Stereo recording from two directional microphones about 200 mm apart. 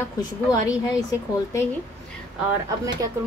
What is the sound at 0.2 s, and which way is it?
Speech, 20° left (ahead or behind).